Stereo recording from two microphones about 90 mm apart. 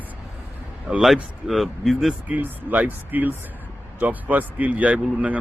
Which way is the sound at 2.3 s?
15° right (ahead or behind).